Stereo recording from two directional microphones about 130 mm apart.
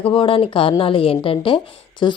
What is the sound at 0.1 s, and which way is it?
Speech, 45° left (ahead or behind).